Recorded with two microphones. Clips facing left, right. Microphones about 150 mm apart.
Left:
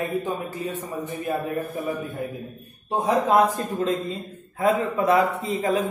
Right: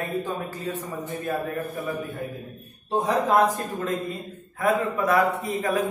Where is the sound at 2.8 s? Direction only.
20° left (ahead or behind).